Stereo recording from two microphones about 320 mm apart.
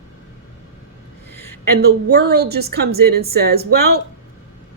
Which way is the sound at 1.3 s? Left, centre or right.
Right.